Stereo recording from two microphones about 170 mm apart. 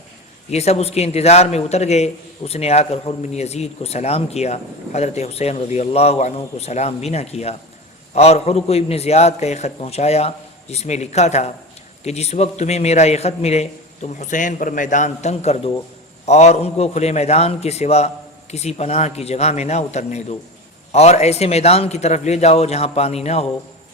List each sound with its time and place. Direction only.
0.5 s a man's voice: 40° left (ahead or behind)